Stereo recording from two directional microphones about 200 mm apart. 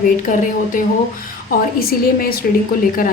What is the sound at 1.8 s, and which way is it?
Speech, 50° left (ahead or behind).